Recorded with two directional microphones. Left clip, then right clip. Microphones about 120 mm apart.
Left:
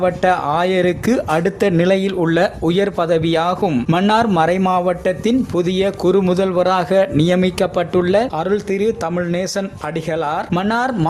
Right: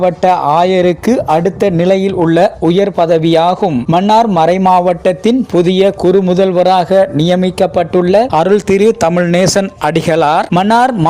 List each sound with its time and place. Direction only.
0.0 s a man's voice: 35° right (ahead or behind)
6.1 s speech: 30° right (ahead or behind)
6.9 s speech: 30° right (ahead or behind)
8.3 s a man's voice: 75° right (ahead or behind)
10.5 s speech: 70° right (ahead or behind)